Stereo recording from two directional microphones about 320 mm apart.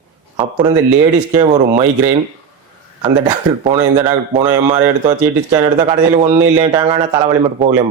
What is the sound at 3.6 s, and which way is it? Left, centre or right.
Speech, centre.